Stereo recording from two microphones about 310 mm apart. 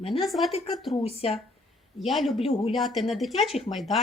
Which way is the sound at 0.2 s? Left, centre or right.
Centre.